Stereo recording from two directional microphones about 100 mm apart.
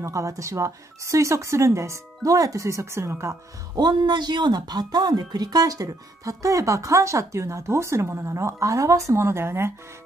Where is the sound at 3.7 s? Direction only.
45° right (ahead or behind).